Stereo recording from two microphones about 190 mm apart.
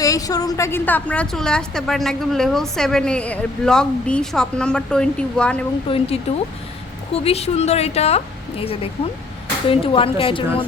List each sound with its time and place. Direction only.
0.0 s a woman's voice: 20° left (ahead or behind)
5.9 s a woman's voice: 25° left (ahead or behind)
7.1 s a woman's voice: 30° left (ahead or behind)